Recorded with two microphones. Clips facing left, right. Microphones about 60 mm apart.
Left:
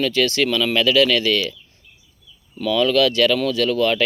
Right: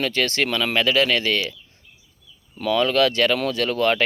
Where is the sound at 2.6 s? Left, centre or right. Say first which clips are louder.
Left 2 dB; right.